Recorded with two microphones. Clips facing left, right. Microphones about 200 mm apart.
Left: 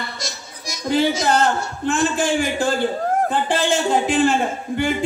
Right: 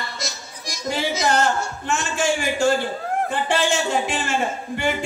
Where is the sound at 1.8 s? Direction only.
55° left (ahead or behind).